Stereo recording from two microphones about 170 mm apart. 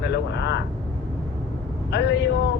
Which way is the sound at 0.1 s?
90° left.